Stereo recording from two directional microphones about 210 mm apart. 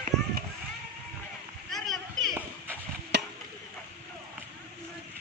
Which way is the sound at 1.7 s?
Centre (ahead or behind).